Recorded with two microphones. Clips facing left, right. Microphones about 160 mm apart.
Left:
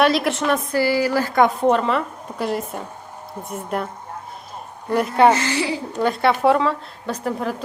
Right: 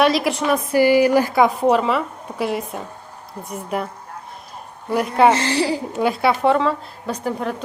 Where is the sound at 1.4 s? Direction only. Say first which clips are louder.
Left 3 dB; centre (ahead or behind).